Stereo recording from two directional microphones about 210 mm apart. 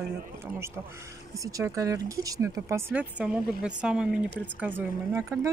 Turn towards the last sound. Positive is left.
turn(degrees=-15)  # may be behind; listen again after turning